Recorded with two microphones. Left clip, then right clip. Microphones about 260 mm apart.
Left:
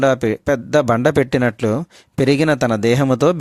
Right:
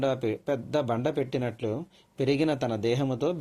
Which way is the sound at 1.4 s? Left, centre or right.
Left.